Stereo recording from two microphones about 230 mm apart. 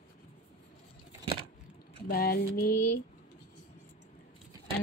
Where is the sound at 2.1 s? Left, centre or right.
Left.